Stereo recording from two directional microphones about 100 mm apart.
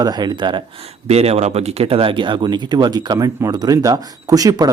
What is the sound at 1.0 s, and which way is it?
Speech, 90° right.